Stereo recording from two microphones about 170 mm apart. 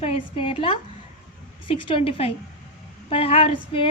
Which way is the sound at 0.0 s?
35° left (ahead or behind).